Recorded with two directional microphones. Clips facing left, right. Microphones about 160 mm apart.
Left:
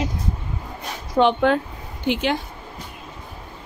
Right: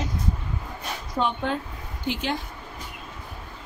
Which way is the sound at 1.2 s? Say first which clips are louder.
Left 9 dB; 75° left (ahead or behind).